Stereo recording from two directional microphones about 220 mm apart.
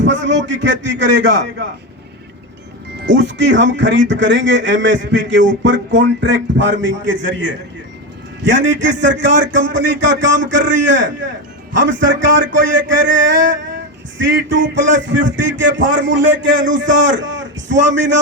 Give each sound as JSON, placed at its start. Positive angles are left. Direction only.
{"t": 0.0, "sound": "speech", "side_deg": -55}
{"t": 3.0, "sound": "speech", "side_deg": -55}